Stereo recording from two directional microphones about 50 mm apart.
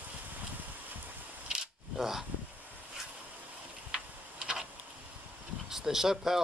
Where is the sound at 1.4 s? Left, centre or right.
Centre.